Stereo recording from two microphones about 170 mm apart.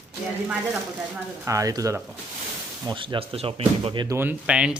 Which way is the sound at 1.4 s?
20° right (ahead or behind).